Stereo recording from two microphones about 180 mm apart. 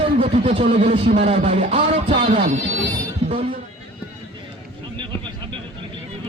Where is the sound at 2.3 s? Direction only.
45° right (ahead or behind).